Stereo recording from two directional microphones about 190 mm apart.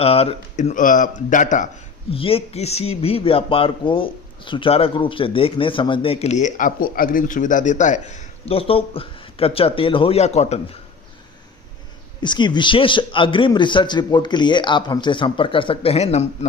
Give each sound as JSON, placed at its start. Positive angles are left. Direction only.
{"t": 0.0, "sound": "speech", "side_deg": 30}
{"t": 2.1, "sound": "speech", "side_deg": 30}
{"t": 12.2, "sound": "a man's voice", "side_deg": 25}